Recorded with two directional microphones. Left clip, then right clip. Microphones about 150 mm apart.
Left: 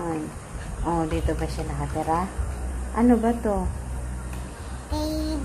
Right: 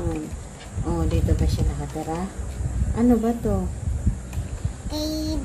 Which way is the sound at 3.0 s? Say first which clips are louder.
Even; 60° right (ahead or behind).